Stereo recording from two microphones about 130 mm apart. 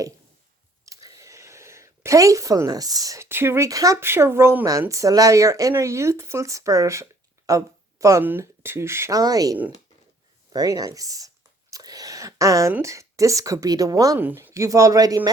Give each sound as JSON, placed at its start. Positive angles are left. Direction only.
{"t": 0.9, "sound": "speech", "side_deg": -25}
{"t": 11.7, "sound": "a sound", "side_deg": -30}
{"t": 12.8, "sound": "speech", "side_deg": -25}
{"t": 14.2, "sound": "speech", "side_deg": -15}